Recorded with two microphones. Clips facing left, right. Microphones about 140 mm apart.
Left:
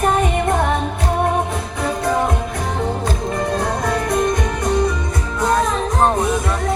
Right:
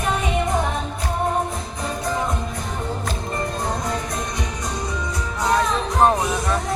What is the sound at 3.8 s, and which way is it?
Music, 65° left (ahead or behind).